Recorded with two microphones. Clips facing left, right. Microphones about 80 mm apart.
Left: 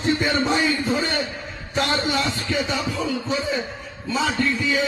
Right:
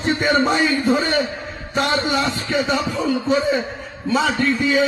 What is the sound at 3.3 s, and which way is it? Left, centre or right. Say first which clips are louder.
Speech: right 9 dB; right.